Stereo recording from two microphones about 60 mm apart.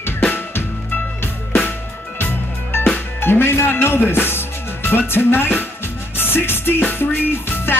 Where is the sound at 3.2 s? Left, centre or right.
Left.